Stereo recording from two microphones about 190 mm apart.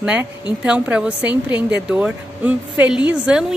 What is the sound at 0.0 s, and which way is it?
A woman's voice, 5° right (ahead or behind).